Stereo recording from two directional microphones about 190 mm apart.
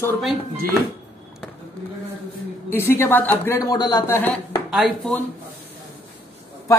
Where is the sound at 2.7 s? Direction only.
15° left (ahead or behind).